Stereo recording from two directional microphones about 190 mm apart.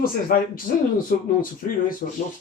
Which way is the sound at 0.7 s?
40° left (ahead or behind).